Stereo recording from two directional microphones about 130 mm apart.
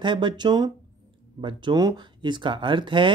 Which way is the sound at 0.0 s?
40° right (ahead or behind).